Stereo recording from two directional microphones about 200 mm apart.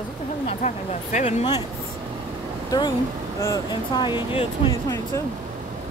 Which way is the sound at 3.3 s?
15° left (ahead or behind).